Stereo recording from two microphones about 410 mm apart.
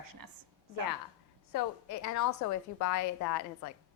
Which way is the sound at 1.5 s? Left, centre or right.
Left.